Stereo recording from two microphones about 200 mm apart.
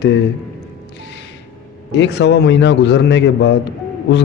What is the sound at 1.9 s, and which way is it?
A man's voice, 60° left (ahead or behind).